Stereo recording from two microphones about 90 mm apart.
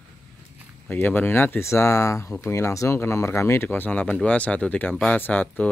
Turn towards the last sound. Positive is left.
turn(degrees=20)  # may be behind; listen again after turning